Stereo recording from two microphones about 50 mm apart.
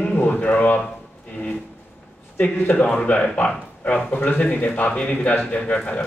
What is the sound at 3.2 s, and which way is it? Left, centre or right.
Speech, left.